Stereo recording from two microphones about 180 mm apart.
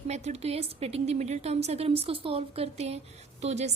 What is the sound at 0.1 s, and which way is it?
A woman's voice, 35° right (ahead or behind).